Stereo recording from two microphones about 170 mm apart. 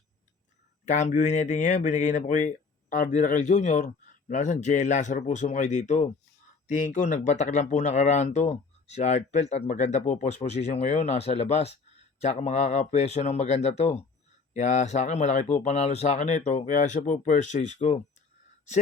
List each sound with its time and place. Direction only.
0.9 s speech: 45° left (ahead or behind)